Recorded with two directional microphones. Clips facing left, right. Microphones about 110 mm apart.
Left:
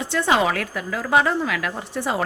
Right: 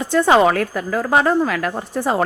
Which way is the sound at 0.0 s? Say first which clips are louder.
Right 6 dB; 45° right (ahead or behind).